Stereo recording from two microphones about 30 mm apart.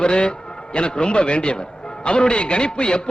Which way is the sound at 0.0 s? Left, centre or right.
Left.